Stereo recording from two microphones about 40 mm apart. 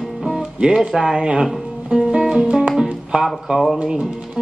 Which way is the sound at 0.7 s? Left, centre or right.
Centre.